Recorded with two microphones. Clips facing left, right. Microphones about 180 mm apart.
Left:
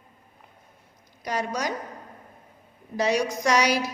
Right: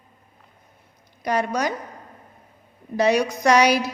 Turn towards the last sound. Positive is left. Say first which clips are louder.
# right 5 dB
turn(degrees=-60)  # may be behind; listen again after turning